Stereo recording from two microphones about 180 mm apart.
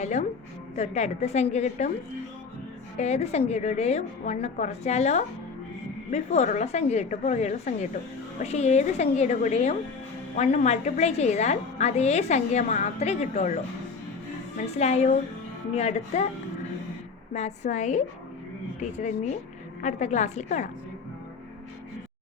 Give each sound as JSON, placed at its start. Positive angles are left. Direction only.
{"t": 0.0, "sound": "a woman's voice", "side_deg": 40}
{"t": 3.0, "sound": "a woman's voice", "side_deg": 35}
{"t": 14.7, "sound": "a woman's voice", "side_deg": 35}
{"t": 17.3, "sound": "a woman's voice", "side_deg": 40}